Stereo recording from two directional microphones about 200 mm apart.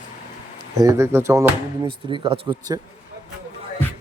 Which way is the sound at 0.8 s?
15° right (ahead or behind).